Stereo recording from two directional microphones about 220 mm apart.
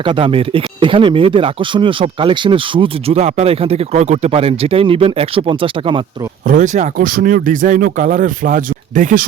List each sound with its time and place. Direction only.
0.0 s speech: 25° right (ahead or behind)
6.5 s speech: 35° right (ahead or behind)